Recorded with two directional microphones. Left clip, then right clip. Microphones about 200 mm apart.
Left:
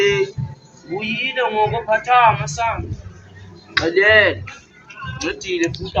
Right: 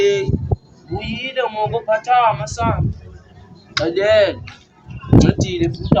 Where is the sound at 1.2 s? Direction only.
25° right (ahead or behind).